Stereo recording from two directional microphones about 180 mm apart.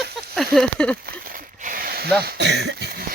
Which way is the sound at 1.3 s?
50° right (ahead or behind).